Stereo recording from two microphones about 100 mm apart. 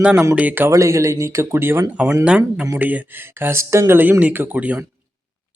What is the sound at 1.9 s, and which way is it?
Speech, 15° right (ahead or behind).